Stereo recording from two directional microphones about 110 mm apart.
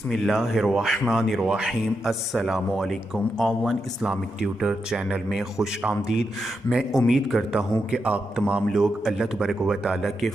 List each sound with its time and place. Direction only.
0.1 s a man's voice: centre (ahead or behind)